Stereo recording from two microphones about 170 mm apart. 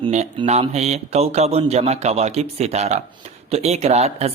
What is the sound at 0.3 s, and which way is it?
Speech, 35° right (ahead or behind).